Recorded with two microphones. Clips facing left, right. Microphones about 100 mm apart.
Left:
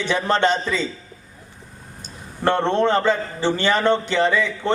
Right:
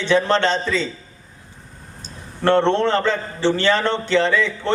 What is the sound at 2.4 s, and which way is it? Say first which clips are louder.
A man's voice: right 2 dB; 15° left (ahead or behind).